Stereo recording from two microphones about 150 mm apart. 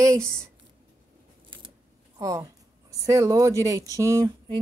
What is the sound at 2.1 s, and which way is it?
Speech, 25° right (ahead or behind).